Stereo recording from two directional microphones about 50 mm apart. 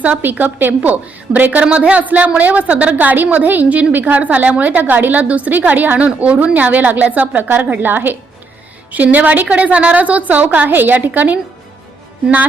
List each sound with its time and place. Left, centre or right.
0.0 s a woman's voice: right